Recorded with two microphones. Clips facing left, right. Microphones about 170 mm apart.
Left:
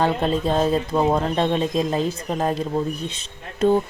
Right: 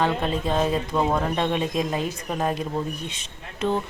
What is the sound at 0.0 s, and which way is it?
Speech, 35° left (ahead or behind).